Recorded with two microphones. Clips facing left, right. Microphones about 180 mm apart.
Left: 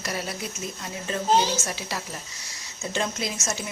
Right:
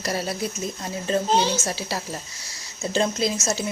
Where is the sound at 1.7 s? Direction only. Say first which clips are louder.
Right 4 dB; 35° right (ahead or behind).